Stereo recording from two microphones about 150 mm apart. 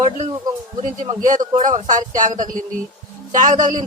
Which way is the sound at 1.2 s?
60° right (ahead or behind).